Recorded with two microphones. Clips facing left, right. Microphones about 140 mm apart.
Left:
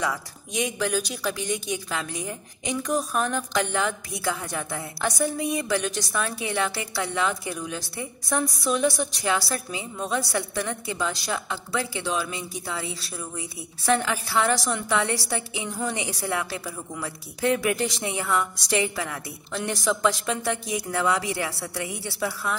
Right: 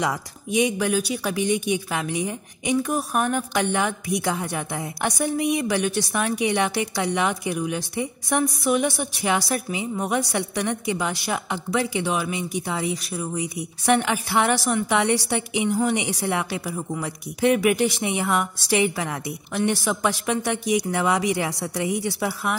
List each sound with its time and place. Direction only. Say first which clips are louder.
0.7 s a woman's voice: right 4 dB; 15° right (ahead or behind)
13.4 s a woman's voice: right 8 dB; 15° right (ahead or behind)